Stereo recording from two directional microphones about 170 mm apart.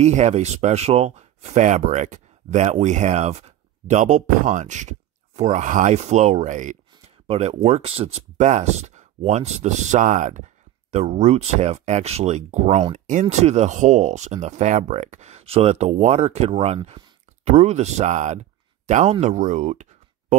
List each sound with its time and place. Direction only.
0.0 s speech: 40° right (ahead or behind)